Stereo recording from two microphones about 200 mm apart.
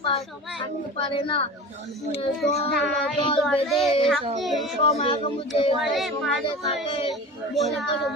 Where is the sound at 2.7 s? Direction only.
Centre (ahead or behind).